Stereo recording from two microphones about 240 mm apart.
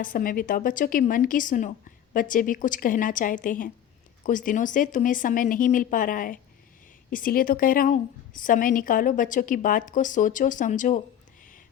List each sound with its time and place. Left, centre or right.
0.0 s a woman's voice: left